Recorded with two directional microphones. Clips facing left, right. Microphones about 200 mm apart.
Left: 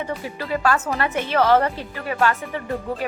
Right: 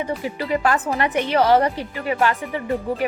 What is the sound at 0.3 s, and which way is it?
A woman's voice, 20° right (ahead or behind).